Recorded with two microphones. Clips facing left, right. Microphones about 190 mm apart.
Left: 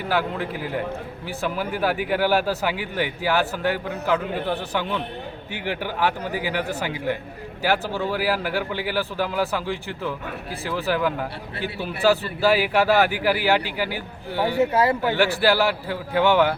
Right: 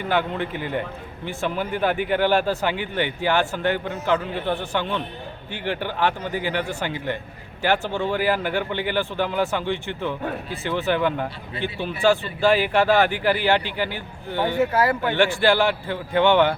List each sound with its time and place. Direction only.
0.0 s speech: 5° left (ahead or behind)
14.6 s speech: 20° left (ahead or behind)
15.0 s speech: 5° left (ahead or behind)